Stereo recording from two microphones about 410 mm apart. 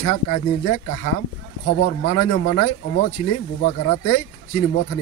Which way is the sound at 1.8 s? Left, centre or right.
Left.